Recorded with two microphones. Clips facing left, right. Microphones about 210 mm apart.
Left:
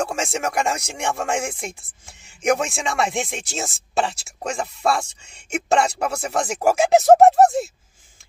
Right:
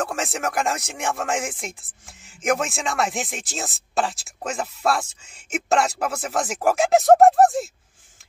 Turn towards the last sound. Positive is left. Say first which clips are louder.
# left 1 dB
turn(degrees=0)  # may be behind; listen again after turning